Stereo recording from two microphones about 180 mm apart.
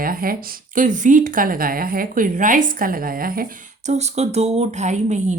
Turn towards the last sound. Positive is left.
turn(degrees=-40)  # may be behind; listen again after turning